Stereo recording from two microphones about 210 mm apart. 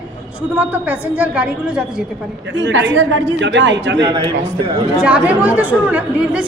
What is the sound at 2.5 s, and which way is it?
A man's voice, 60° right (ahead or behind).